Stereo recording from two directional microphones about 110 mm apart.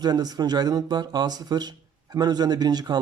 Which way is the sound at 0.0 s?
35° right (ahead or behind).